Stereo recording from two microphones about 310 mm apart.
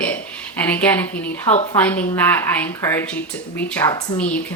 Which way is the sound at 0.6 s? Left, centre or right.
Centre.